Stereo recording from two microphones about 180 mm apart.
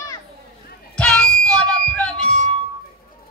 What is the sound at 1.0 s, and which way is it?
Music, 5° left (ahead or behind).